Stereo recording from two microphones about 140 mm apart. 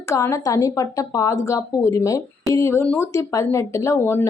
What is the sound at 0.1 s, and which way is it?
A woman's voice, 20° left (ahead or behind).